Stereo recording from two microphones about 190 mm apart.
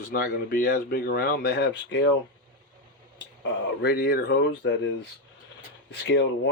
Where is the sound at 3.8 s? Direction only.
55° left (ahead or behind).